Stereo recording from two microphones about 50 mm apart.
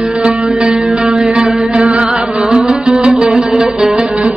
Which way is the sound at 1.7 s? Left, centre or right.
Right.